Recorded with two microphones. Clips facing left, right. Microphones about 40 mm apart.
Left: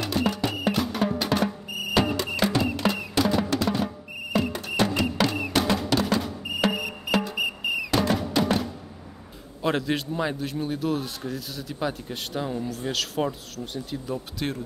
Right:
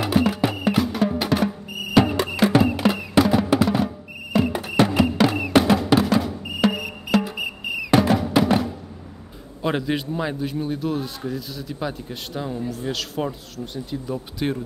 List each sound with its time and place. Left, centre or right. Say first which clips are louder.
0.3 s music: right 4 dB; centre
3.2 s drum: right 7 dB; centre
4.4 s music: right 6 dB; centre
7.2 s cricket: left 1 dB; centre
8.0 s music: right 5 dB; centre
9.6 s a man's voice: right 2 dB; centre